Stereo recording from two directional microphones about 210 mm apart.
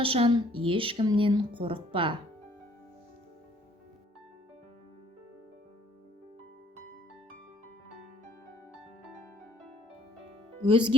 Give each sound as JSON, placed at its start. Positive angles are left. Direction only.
{"t": 0.0, "sound": "speech", "side_deg": -25}
{"t": 10.7, "sound": "speech", "side_deg": -25}